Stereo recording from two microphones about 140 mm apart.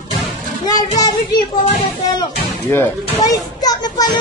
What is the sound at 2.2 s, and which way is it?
A child's voice, 20° left (ahead or behind).